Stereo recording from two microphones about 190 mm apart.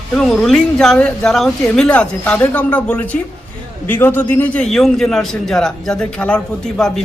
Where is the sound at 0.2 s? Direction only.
Centre (ahead or behind).